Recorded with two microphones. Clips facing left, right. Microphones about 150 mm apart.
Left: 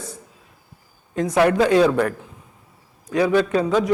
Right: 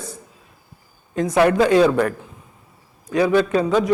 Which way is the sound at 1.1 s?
20° right (ahead or behind).